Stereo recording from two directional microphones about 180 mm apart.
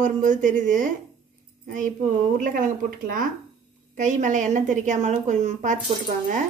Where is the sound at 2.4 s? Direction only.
45° right (ahead or behind).